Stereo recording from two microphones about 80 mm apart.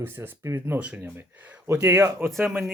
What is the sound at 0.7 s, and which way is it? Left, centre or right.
Speech, centre.